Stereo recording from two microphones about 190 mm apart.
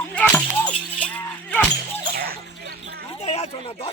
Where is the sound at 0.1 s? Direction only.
5° left (ahead or behind).